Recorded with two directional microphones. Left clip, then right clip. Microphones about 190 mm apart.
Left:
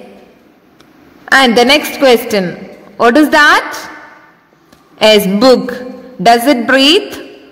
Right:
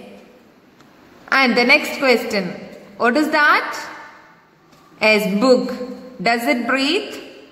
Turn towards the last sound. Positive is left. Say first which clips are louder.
# left 10 dB
turn(degrees=45)  # may be behind; listen again after turning